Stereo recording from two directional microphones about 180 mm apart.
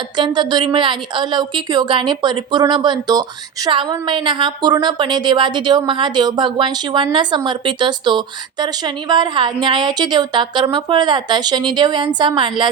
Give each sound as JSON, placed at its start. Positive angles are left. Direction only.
{"t": 0.2, "sound": "speech", "side_deg": -25}